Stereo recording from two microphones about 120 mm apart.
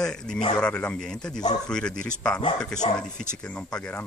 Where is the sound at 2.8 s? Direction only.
50° left (ahead or behind).